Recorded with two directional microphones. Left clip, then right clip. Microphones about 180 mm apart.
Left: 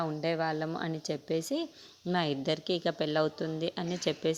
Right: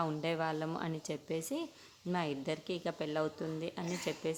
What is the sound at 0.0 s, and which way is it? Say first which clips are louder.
A woman's voice: left 4 dB; 20° left (ahead or behind).